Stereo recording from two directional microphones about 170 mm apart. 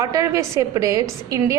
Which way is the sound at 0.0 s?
20° right (ahead or behind).